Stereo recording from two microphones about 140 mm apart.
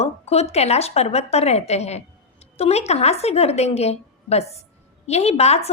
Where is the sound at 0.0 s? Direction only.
50° left (ahead or behind).